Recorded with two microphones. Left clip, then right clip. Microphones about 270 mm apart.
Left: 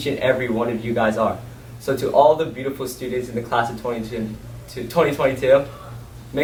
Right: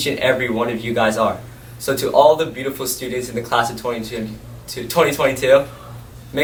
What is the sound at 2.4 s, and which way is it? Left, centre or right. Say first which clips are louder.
Speech: right 2 dB; centre.